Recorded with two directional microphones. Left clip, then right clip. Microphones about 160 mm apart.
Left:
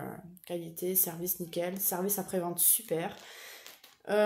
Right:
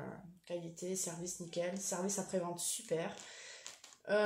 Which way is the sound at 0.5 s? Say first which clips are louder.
Left 6 dB; 55° left (ahead or behind).